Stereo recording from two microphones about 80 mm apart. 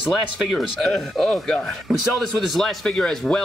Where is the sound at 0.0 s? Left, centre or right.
Centre.